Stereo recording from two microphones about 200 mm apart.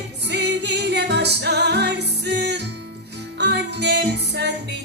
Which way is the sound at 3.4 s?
60° right (ahead or behind).